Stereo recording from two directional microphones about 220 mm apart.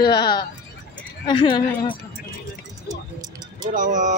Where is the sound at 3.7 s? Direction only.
35° right (ahead or behind).